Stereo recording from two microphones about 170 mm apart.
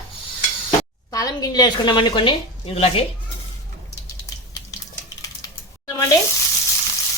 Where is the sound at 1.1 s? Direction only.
20° left (ahead or behind).